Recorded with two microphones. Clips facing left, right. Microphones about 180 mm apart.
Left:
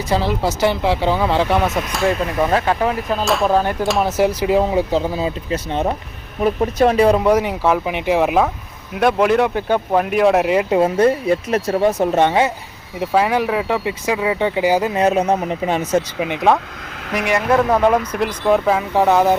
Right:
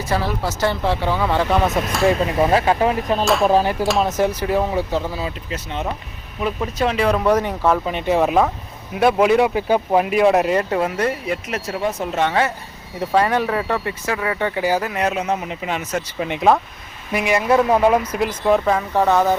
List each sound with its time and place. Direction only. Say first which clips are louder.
0.1 s speech: left 4 dB; 20° left (ahead or behind); by 2.1 s centre (ahead or behind)
2.4 s speech: right 1 dB; 10° right (ahead or behind); by 5.3 s 20° left (ahead or behind)
6.4 s speech: left 6 dB; 40° left (ahead or behind)
7.2 s speech: left 2 dB; 10° left (ahead or behind)
10.8 s speech: left 6 dB; 25° left (ahead or behind)
12.2 s speech: left 2 dB; 20° left (ahead or behind)
13.1 s speech: left 1 dB; 5° left (ahead or behind)
13.8 s speech: left 4 dB; 15° left (ahead or behind)
16.2 s speech: even; centre (ahead or behind)